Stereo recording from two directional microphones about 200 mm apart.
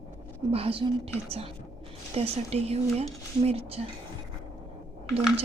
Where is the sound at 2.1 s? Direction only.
30° right (ahead or behind).